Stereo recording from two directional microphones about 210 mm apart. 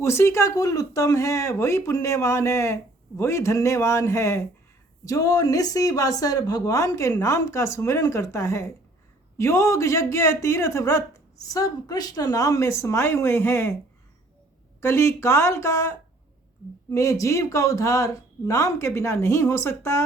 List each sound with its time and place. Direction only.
0.0 s speech: 10° left (ahead or behind)
14.8 s speech: 10° left (ahead or behind)